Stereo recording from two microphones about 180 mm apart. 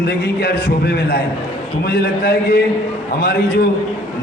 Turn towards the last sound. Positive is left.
turn(degrees=60)  # may be behind; listen again after turning